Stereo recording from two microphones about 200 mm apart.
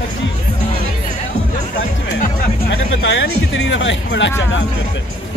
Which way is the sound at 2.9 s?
70° left (ahead or behind).